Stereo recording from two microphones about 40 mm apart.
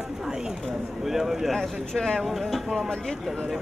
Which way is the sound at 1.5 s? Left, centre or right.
Centre.